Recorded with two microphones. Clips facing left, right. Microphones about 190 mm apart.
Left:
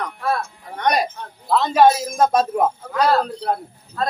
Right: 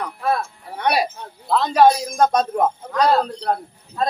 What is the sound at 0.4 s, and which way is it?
Music, 5° right (ahead or behind).